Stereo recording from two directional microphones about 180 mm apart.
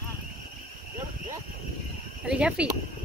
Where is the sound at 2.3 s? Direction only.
5° right (ahead or behind).